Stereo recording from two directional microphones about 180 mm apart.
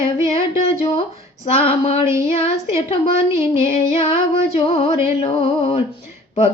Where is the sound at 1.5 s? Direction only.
35° left (ahead or behind).